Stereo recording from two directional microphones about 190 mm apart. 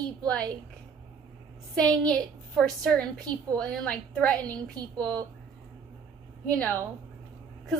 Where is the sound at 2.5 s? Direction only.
Centre (ahead or behind).